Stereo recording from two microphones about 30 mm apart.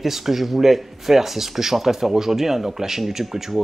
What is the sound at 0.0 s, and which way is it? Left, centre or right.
Speech, centre.